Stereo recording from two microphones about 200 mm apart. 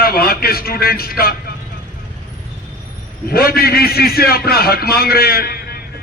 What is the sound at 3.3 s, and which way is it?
A man's voice, 50° left (ahead or behind).